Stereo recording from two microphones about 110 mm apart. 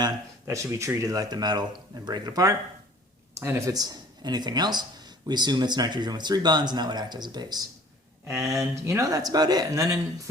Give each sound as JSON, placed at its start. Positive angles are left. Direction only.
{"t": 0.4, "sound": "speech", "side_deg": -30}